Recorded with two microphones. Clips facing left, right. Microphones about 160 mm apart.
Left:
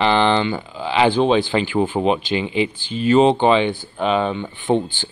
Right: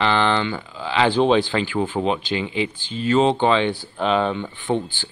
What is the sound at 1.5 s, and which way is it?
Speech, 20° left (ahead or behind).